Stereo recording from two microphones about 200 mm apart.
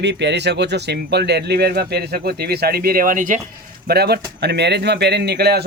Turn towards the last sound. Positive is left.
turn(degrees=-55)  # may be behind; listen again after turning